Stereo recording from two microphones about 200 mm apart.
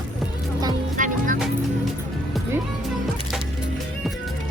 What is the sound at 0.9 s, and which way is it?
Music, 40° right (ahead or behind).